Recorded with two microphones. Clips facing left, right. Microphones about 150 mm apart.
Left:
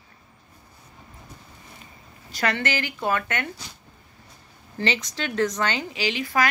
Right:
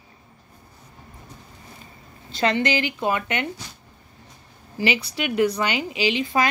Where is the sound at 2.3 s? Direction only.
20° right (ahead or behind).